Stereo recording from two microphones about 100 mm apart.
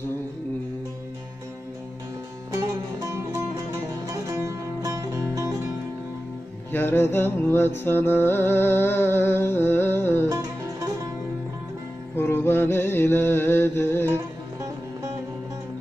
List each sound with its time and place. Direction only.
2.5 s music: 30° right (ahead or behind)
6.7 s music: 20° left (ahead or behind)
12.2 s music: 25° left (ahead or behind)
14.1 s music: 35° right (ahead or behind)